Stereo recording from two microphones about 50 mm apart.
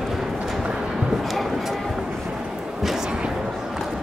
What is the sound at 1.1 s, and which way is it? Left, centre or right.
Music, centre.